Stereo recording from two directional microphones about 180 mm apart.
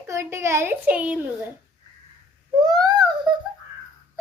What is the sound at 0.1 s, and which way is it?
A child's voice, 15° right (ahead or behind).